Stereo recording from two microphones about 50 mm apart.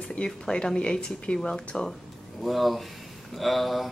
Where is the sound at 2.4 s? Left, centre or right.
Centre.